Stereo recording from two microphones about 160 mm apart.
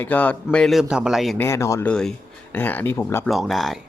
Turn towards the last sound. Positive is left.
turn(degrees=0)  # may be behind; listen again after turning